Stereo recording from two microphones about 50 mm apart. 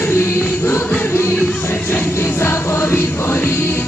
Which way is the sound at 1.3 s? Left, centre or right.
Left.